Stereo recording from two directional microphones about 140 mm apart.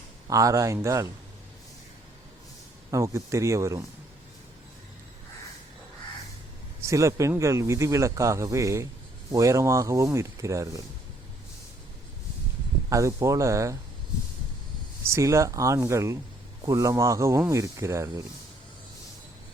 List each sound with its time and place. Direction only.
0.3 s speech: 25° right (ahead or behind)
2.9 s speech: 20° right (ahead or behind)
6.8 s speech: 20° right (ahead or behind)
12.9 s speech: 20° right (ahead or behind)
15.0 s speech: 20° right (ahead or behind)